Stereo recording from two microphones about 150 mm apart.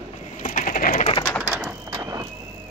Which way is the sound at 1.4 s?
5° right (ahead or behind).